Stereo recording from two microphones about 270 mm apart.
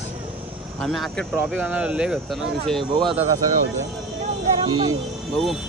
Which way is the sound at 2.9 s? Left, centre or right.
Centre.